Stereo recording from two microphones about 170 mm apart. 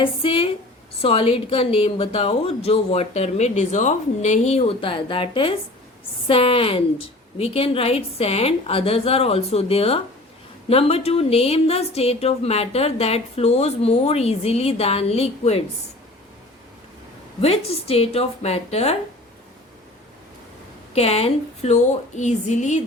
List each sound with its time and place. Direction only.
0.0 s a woman's voice: 30° left (ahead or behind)
17.4 s a woman's voice: 35° left (ahead or behind)
20.9 s a woman's voice: 35° left (ahead or behind)